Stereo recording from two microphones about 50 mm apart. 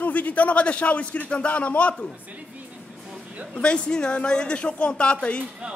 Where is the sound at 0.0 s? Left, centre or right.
Left.